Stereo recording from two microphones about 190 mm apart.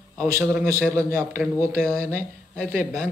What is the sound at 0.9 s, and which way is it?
Speech, 15° right (ahead or behind).